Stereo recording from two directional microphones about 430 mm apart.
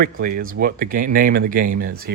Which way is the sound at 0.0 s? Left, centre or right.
Centre.